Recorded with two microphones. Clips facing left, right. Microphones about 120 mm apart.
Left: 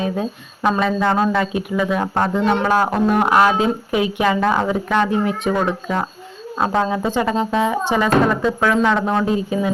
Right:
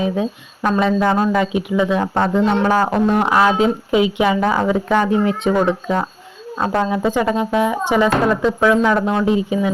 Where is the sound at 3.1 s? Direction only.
15° left (ahead or behind).